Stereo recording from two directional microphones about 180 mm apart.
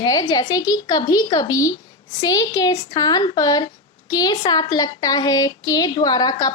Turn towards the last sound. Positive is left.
turn(degrees=20)  # may be behind; listen again after turning